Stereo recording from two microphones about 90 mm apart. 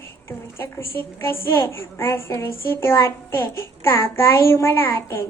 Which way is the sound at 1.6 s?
30° left (ahead or behind).